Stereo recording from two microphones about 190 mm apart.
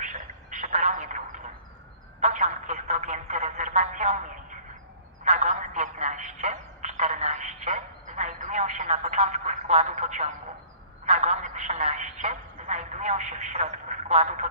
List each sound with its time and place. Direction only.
0.0 s telephone: 40° right (ahead or behind)